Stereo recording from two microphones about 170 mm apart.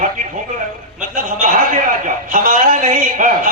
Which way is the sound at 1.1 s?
50° right (ahead or behind).